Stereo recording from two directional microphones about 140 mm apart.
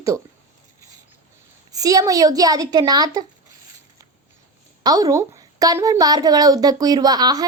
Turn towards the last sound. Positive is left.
turn(degrees=-25)  # may be behind; listen again after turning